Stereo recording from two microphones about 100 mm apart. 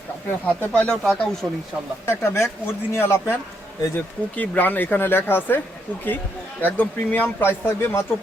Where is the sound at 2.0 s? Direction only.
25° left (ahead or behind).